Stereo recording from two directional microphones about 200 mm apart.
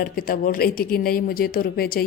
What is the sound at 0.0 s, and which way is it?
Mantra, 45° left (ahead or behind).